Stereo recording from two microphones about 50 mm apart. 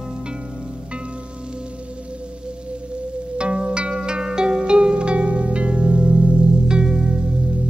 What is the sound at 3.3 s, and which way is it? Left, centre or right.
Music, right.